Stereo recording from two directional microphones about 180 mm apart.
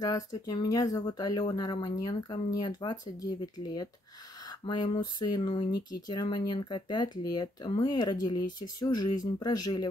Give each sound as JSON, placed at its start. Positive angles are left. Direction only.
{"t": 0.0, "sound": "speech", "side_deg": 20}